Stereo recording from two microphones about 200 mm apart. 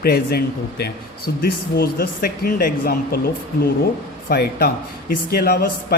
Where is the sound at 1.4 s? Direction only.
50° left (ahead or behind).